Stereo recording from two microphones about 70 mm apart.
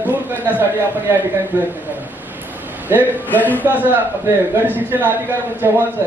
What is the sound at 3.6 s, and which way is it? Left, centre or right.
A man's voice, right.